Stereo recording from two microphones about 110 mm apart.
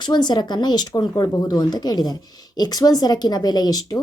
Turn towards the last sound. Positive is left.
turn(degrees=40)  # may be behind; listen again after turning